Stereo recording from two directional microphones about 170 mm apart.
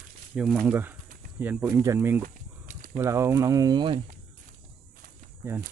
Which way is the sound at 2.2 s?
50° right (ahead or behind).